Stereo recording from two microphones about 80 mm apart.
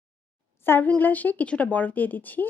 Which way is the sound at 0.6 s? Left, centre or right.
Left.